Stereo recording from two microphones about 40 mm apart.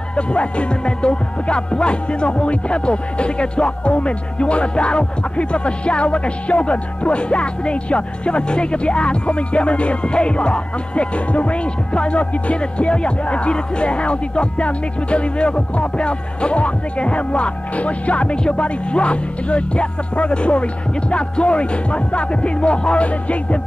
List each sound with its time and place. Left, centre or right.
0.1 s music: left